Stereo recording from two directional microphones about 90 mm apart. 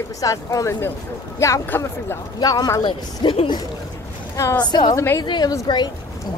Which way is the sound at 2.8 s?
65° left (ahead or behind).